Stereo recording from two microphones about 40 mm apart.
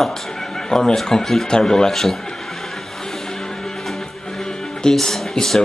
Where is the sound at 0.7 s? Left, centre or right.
Centre.